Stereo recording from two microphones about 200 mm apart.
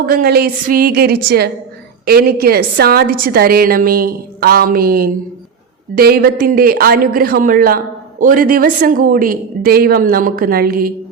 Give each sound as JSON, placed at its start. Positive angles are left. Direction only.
{"t": 0.0, "sound": "a woman's voice", "side_deg": -50}